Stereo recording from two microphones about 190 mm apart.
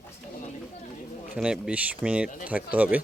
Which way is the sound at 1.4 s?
5° right (ahead or behind).